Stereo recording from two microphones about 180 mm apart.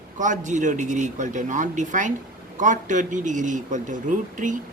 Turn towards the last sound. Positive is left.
turn(degrees=-45)  # may be behind; listen again after turning